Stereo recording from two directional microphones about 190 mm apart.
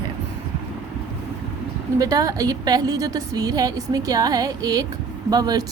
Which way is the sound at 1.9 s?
20° right (ahead or behind).